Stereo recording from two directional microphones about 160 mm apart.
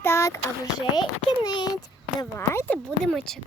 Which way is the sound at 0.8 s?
30° left (ahead or behind).